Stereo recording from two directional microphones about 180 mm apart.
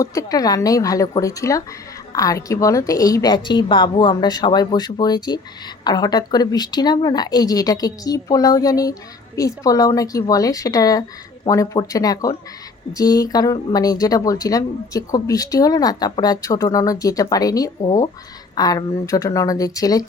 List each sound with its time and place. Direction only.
0.0 s speech: 20° left (ahead or behind)